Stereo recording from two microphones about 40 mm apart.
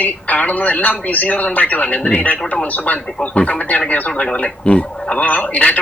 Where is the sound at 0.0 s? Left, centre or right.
Left.